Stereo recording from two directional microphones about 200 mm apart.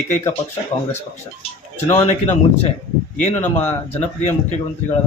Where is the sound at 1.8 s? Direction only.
35° left (ahead or behind).